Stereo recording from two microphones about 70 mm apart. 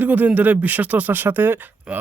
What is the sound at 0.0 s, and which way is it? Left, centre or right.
Speech, right.